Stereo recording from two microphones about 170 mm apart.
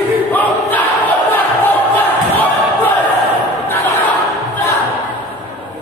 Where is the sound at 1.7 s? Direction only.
10° left (ahead or behind).